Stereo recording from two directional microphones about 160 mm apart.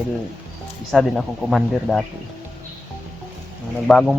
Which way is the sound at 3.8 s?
5° left (ahead or behind).